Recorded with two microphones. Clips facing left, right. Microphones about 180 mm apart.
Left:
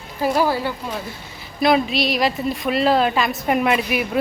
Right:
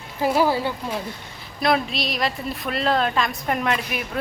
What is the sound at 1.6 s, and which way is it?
A woman's voice, centre (ahead or behind).